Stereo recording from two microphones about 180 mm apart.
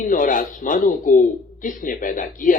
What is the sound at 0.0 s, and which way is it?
Speech, 50° left (ahead or behind).